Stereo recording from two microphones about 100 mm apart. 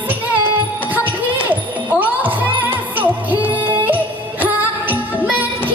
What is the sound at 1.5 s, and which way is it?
Music, 15° right (ahead or behind).